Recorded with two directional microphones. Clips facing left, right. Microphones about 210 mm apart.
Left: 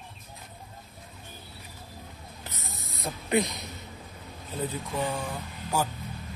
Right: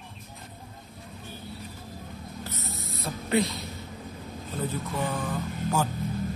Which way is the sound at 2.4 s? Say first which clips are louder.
Right 3 dB; 15° left (ahead or behind).